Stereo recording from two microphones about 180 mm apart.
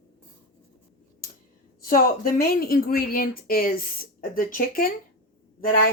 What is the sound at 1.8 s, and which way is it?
A woman's voice, 50° left (ahead or behind).